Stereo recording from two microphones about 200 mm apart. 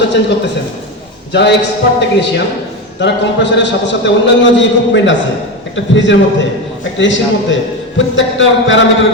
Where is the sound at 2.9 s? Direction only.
60° left (ahead or behind).